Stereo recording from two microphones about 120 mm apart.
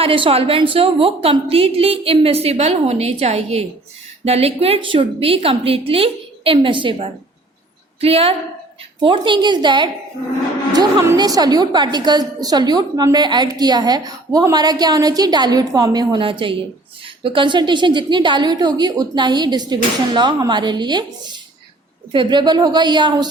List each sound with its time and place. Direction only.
0.0 s a woman's voice: 50° right (ahead or behind)
9.0 s a woman's voice: 45° right (ahead or behind)